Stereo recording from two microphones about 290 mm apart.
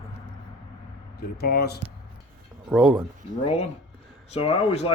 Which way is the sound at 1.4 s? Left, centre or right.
Left.